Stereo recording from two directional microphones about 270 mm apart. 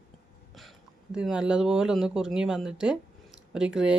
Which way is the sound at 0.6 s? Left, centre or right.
Centre.